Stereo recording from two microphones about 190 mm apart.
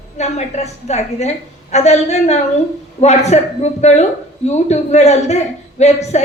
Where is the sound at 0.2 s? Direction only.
35° left (ahead or behind).